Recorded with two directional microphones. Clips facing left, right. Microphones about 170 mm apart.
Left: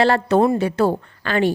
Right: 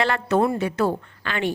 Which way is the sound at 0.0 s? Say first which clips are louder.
Left 5 dB; 30° left (ahead or behind).